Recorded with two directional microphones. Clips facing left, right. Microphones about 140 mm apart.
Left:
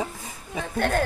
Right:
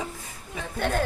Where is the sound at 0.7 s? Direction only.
5° right (ahead or behind).